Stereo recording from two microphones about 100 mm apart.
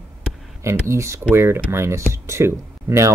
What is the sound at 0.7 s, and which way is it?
Speech, 30° right (ahead or behind).